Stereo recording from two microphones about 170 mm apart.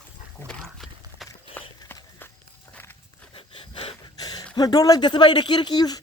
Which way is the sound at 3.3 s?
30° left (ahead or behind).